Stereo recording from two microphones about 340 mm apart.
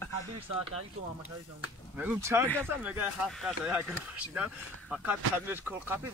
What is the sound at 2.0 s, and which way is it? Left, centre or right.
Speech, centre.